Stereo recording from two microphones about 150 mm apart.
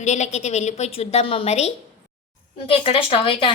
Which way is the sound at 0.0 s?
50° left (ahead or behind).